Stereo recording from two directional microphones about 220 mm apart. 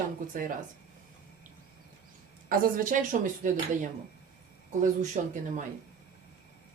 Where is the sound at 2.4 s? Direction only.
40° right (ahead or behind).